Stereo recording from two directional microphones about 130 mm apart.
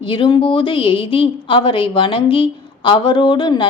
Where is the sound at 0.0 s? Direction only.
40° left (ahead or behind).